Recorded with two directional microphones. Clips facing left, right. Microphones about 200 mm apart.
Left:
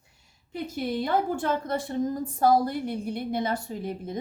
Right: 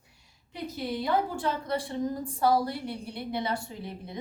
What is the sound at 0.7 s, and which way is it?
A woman's voice, 50° left (ahead or behind).